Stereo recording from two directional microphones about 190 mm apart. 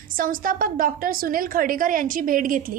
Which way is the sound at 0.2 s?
45° right (ahead or behind).